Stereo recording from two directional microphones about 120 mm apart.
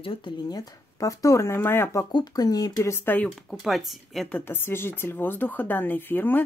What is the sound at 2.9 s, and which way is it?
Speech, 15° left (ahead or behind).